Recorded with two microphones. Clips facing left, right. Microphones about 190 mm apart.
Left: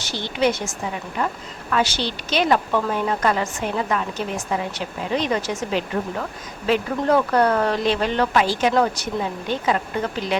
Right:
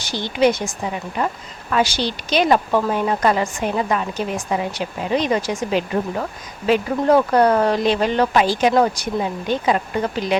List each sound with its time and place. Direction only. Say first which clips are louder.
0.0 s a woman's voice: right 4 dB; 15° right (ahead or behind)